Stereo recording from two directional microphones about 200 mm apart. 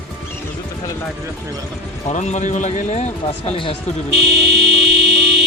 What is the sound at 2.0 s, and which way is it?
A man's voice, 35° left (ahead or behind).